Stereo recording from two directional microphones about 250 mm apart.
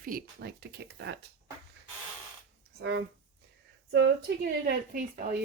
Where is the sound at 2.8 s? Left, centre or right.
Right.